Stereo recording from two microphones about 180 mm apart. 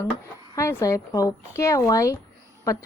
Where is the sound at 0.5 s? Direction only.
15° left (ahead or behind).